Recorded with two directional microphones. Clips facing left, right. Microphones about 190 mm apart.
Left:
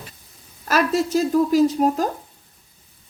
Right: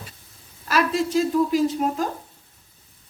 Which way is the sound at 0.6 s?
45° left (ahead or behind).